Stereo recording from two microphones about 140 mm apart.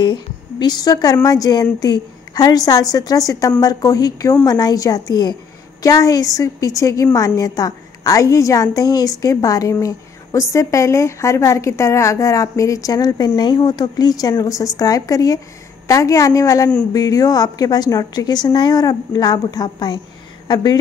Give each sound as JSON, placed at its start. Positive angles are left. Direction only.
{"t": 0.0, "sound": "a woman's voice", "side_deg": 30}